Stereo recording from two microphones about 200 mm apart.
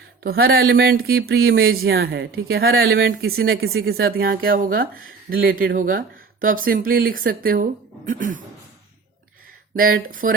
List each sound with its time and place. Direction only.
0.4 s speech: 50° right (ahead or behind)
9.7 s speech: 45° right (ahead or behind)